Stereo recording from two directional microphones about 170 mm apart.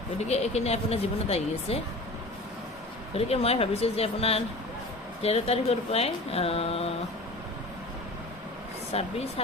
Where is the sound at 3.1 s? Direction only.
35° left (ahead or behind).